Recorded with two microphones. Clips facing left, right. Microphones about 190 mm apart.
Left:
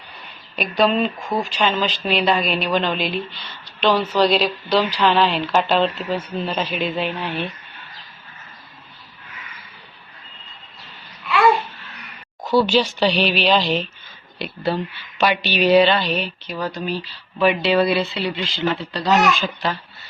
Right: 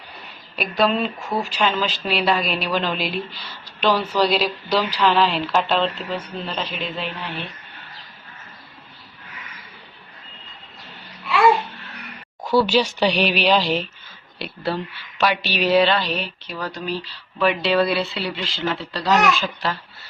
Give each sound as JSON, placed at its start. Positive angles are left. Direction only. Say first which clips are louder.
{"t": 0.5, "sound": "speech", "louder": "left 2 dB", "side_deg": 0}
{"t": 1.3, "sound": "speech", "louder": "left 1 dB", "side_deg": 15}
{"t": 1.6, "sound": "speech", "louder": "left 1 dB", "side_deg": 0}
{"t": 12.4, "sound": "speech", "louder": "left 1 dB", "side_deg": -10}